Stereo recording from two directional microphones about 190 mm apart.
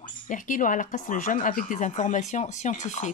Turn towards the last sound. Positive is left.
turn(degrees=40)  # may be behind; listen again after turning